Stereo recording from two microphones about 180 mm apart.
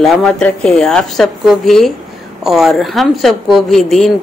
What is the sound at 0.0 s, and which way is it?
A woman's voice, 5° left (ahead or behind).